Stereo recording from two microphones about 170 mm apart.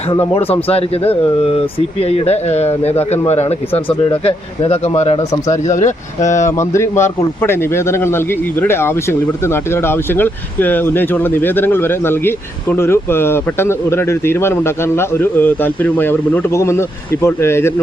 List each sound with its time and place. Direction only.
0.3 s a man's voice: 35° left (ahead or behind)
6.6 s a man's voice: 15° left (ahead or behind)